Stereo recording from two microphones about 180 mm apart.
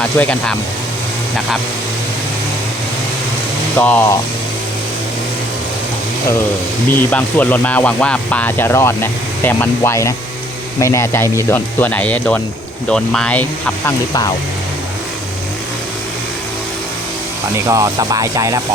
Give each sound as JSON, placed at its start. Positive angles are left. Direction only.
{"t": 0.2, "sound": "speech", "side_deg": 5}
{"t": 3.8, "sound": "speech", "side_deg": 10}
{"t": 6.9, "sound": "speech", "side_deg": 10}
{"t": 17.7, "sound": "speech", "side_deg": -20}